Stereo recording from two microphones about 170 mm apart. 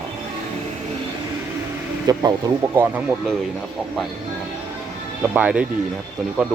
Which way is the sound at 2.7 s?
10° right (ahead or behind).